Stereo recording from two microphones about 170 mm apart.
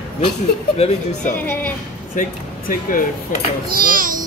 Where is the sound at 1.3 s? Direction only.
10° left (ahead or behind).